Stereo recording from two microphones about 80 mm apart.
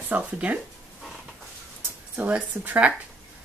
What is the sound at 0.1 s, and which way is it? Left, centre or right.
Speech, centre.